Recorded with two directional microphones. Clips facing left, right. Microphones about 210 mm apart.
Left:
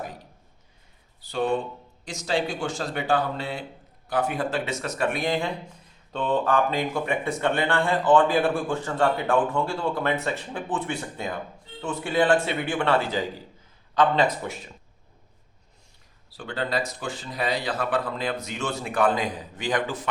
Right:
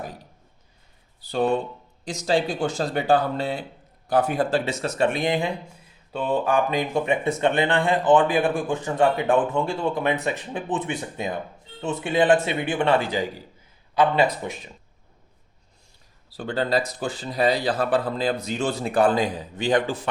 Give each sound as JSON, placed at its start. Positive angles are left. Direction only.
{"t": 2.0, "sound": "speech", "side_deg": -35}
{"t": 16.4, "sound": "speech", "side_deg": -35}